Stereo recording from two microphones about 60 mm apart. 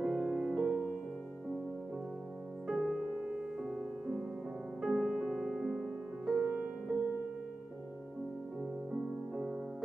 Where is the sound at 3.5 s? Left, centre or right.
Centre.